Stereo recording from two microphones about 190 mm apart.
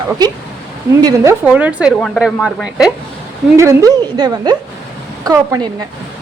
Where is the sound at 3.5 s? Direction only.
15° right (ahead or behind).